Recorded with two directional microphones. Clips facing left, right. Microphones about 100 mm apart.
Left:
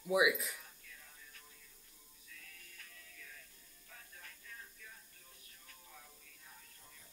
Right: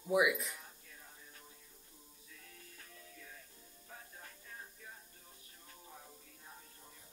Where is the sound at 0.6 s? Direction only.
30° right (ahead or behind).